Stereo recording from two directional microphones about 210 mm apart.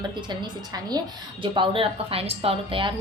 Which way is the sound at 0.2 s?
20° right (ahead or behind).